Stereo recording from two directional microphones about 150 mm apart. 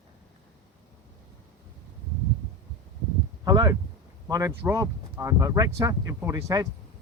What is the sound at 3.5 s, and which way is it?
Speech, 25° right (ahead or behind).